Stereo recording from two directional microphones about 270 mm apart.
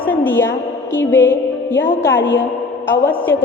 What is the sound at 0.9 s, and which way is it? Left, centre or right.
Speech, centre.